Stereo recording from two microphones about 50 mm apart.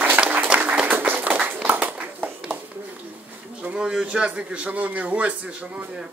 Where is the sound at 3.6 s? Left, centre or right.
Right.